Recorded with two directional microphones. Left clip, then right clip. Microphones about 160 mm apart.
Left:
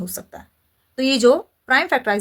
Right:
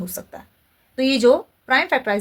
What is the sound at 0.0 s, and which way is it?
A woman's voice, 25° left (ahead or behind).